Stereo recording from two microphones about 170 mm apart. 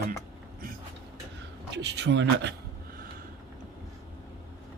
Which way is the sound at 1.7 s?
90° right.